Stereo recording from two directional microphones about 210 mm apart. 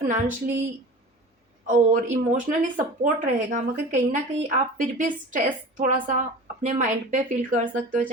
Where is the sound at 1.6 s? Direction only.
40° right (ahead or behind).